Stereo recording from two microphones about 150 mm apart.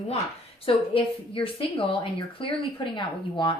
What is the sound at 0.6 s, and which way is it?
A woman's voice, 35° left (ahead or behind).